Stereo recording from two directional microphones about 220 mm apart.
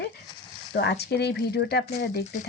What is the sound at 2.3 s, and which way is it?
Speech, 35° left (ahead or behind).